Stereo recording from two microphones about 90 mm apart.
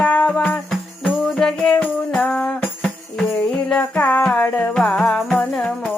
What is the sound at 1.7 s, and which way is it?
Music, 20° left (ahead or behind).